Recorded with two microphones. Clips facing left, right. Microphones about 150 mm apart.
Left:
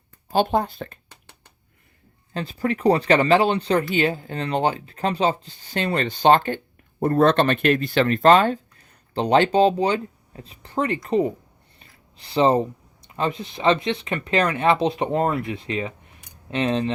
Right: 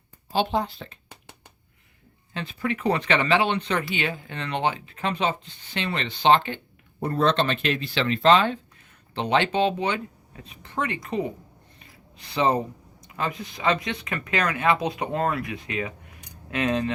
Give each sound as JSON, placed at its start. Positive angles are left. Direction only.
{"t": 0.3, "sound": "speech", "side_deg": 50}
{"t": 2.3, "sound": "speech", "side_deg": 35}